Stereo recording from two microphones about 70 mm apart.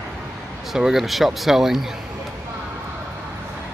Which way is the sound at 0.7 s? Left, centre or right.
Centre.